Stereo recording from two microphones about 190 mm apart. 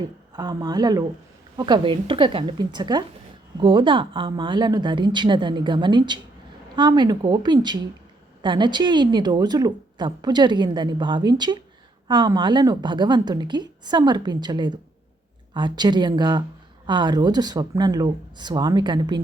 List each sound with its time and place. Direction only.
0.0 s a woman's voice: 20° right (ahead or behind)